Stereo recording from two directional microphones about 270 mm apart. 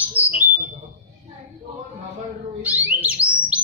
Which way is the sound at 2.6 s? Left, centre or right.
Centre.